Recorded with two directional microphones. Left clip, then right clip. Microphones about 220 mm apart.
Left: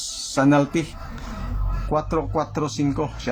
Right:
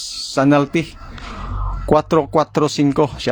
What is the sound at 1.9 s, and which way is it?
Speech, 45° right (ahead or behind).